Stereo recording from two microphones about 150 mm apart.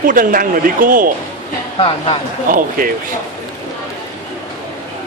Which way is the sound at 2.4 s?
70° right (ahead or behind).